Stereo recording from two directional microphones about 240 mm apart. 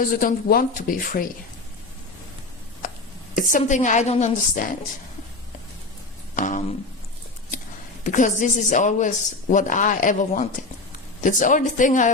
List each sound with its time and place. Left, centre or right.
0.1 s speech: left
3.3 s speech: left
6.3 s a sound: left
8.0 s speech: left